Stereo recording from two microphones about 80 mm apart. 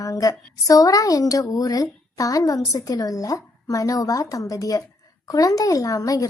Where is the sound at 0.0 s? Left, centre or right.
Left.